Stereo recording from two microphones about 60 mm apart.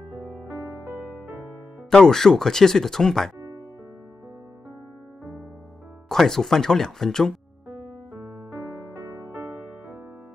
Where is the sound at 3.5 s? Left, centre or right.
Right.